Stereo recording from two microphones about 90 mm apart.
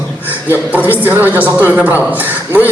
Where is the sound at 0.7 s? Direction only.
20° right (ahead or behind).